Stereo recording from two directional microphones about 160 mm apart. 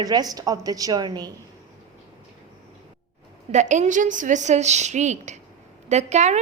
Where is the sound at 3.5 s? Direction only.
50° right (ahead or behind).